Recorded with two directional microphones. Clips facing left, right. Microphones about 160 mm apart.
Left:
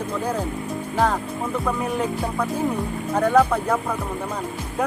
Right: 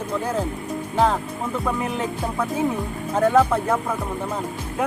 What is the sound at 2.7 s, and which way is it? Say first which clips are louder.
Speech: even; centre (ahead or behind).